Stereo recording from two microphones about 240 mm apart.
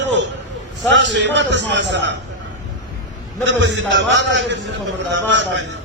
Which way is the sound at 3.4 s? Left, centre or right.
Right.